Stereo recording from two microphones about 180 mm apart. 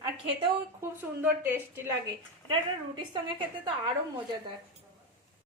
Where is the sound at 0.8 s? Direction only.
10° right (ahead or behind).